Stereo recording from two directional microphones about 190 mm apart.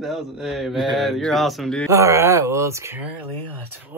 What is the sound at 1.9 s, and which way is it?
A man's voice, 15° right (ahead or behind).